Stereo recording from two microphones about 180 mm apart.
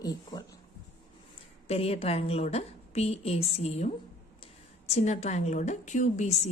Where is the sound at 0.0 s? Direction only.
20° left (ahead or behind).